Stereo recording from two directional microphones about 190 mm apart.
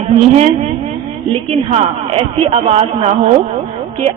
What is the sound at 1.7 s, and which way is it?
A man's voice, 30° right (ahead or behind).